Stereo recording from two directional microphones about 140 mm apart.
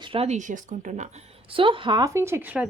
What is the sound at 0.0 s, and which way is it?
Speech, 40° right (ahead or behind).